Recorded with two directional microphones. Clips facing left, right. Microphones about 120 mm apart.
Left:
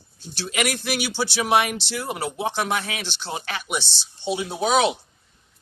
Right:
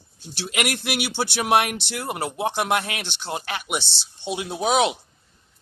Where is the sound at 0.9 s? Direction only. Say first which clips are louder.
Even; 60° right (ahead or behind).